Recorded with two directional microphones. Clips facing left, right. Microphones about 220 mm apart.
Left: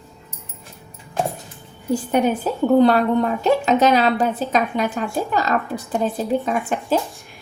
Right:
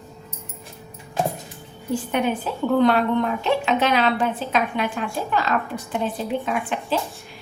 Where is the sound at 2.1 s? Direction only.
40° left (ahead or behind).